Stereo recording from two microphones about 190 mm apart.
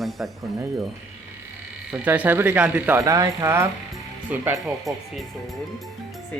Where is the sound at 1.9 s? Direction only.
10° right (ahead or behind).